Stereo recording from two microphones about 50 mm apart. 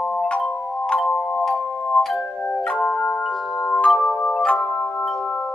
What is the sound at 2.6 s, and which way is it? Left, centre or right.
Music, left.